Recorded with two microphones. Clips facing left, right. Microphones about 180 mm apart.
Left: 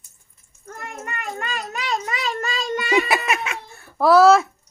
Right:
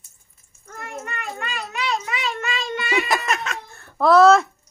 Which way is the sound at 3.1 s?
10° left (ahead or behind).